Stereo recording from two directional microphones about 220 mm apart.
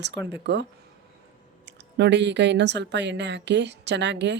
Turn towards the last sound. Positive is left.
turn(degrees=-50)  # may be behind; listen again after turning